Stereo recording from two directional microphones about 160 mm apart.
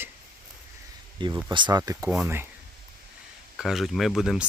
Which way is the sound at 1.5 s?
30° right (ahead or behind).